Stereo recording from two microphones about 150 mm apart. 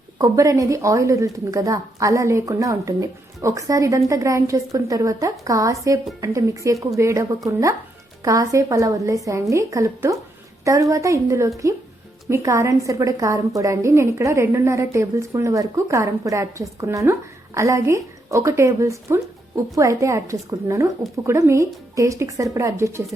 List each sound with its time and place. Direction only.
0.2 s a woman's voice: 20° right (ahead or behind)